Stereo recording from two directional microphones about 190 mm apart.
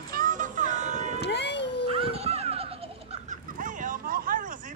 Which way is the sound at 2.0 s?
30° right (ahead or behind).